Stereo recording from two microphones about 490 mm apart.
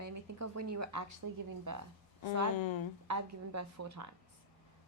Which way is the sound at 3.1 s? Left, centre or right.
Right.